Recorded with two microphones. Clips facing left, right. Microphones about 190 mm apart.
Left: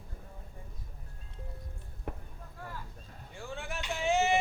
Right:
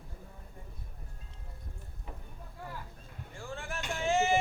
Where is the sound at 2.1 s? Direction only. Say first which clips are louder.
Left 7 dB; 60° left (ahead or behind).